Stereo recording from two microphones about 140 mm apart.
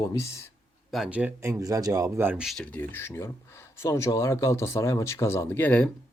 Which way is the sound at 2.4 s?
Centre (ahead or behind).